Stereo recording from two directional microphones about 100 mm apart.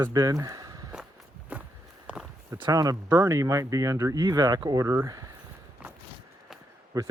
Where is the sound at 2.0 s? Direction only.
5° right (ahead or behind).